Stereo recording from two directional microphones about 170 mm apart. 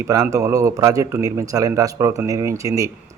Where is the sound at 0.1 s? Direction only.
20° right (ahead or behind).